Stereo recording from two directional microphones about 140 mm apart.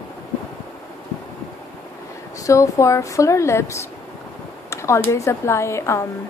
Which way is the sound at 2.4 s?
20° left (ahead or behind).